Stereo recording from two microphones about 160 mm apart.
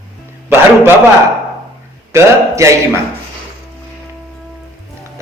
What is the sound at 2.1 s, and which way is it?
Speech, 20° right (ahead or behind).